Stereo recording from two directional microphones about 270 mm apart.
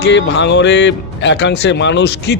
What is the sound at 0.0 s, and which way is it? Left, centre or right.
Speech, left.